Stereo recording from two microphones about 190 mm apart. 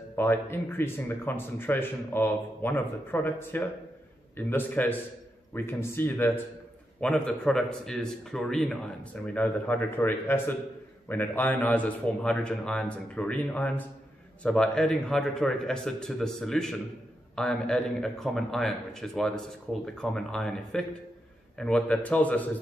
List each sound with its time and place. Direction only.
0.1 s a man's voice: 10° left (ahead or behind)